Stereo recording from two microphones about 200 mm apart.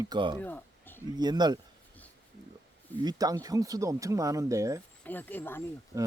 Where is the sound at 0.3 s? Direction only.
10° left (ahead or behind).